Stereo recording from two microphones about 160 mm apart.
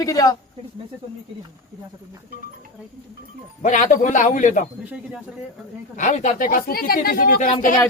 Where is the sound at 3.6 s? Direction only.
50° left (ahead or behind).